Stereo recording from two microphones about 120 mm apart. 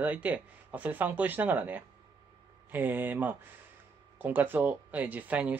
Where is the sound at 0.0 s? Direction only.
15° right (ahead or behind).